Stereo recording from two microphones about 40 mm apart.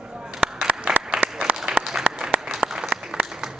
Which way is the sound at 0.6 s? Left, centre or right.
Right.